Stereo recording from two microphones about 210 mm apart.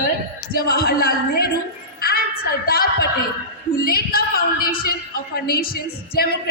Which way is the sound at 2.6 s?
45° left (ahead or behind).